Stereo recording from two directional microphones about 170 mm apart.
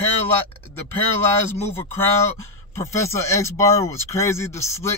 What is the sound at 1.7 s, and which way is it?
Speech, 15° left (ahead or behind).